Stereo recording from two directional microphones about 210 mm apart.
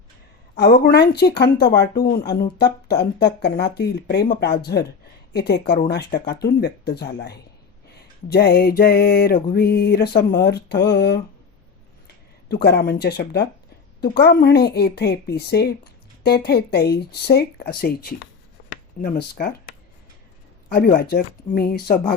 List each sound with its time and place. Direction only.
0.5 s a woman's voice: 50° left (ahead or behind)
12.5 s a woman's voice: 50° left (ahead or behind)
20.7 s a woman's voice: 45° left (ahead or behind)